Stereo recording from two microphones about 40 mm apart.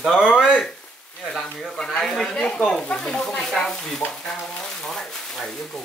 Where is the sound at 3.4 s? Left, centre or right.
Centre.